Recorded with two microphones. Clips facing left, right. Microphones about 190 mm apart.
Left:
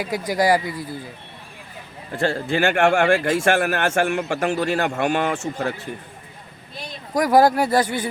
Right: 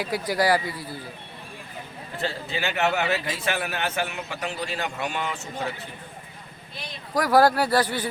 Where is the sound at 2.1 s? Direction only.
50° left (ahead or behind).